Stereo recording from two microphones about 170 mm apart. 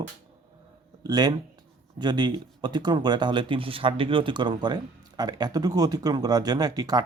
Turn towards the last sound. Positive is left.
turn(degrees=-25)  # may be behind; listen again after turning